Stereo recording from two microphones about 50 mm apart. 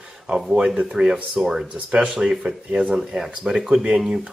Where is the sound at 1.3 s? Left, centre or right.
Centre.